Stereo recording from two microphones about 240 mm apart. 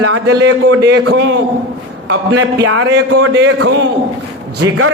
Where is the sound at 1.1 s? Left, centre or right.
Right.